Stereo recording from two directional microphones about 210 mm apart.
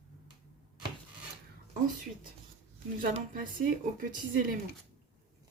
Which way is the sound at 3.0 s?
40° right (ahead or behind).